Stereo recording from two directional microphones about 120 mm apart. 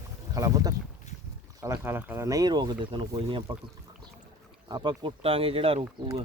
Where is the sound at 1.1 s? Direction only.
70° left (ahead or behind).